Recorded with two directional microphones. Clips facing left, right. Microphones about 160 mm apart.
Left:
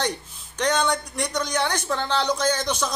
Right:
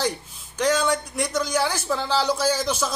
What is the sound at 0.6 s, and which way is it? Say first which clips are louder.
Speech: right 1 dB; 5° right (ahead or behind).